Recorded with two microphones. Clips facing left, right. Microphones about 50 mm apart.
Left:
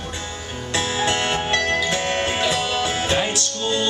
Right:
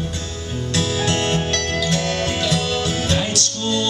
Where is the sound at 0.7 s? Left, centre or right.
Left.